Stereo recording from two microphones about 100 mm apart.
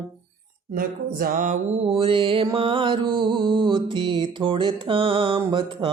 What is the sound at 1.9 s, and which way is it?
Music, 65° right (ahead or behind).